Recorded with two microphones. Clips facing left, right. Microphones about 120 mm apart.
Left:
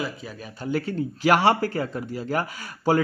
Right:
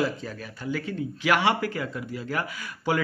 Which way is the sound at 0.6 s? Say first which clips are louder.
Left 4 dB; 35° left (ahead or behind).